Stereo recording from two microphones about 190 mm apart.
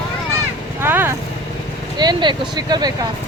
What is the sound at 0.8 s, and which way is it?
Vehicle, 10° right (ahead or behind).